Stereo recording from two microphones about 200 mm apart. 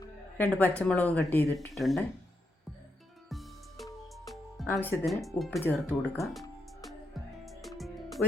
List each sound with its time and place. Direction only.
0.0 s a sound: 10° left (ahead or behind)
0.8 s speech: 5° left (ahead or behind)
3.2 s music: centre (ahead or behind)
4.3 s speech: centre (ahead or behind)
7.4 s music: centre (ahead or behind)